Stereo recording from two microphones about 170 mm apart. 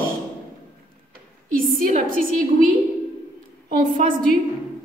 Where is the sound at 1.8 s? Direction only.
50° right (ahead or behind).